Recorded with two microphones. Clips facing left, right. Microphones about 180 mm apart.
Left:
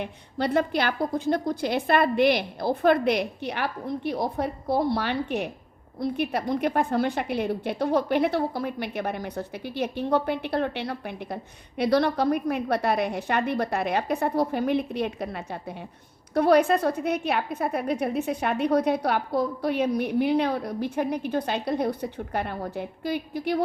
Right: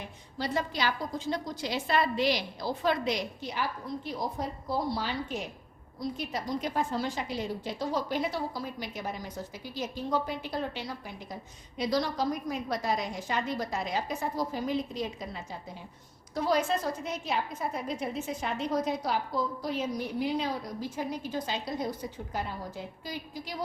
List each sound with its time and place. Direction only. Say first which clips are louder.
0.0 s a woman's voice: left 8 dB; 60° left (ahead or behind)